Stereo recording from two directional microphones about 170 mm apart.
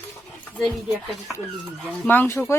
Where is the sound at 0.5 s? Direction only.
5° left (ahead or behind).